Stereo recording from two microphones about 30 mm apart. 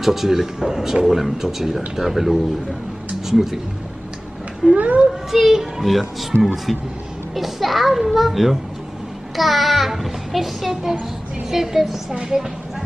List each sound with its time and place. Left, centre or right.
0.0 s speech: centre
4.7 s a child's voice: right
5.3 s speech: centre
6.4 s child singing: centre
10.7 s speech: centre
12.1 s speech: right